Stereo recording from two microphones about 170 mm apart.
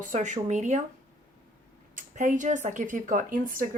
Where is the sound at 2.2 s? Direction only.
50° right (ahead or behind).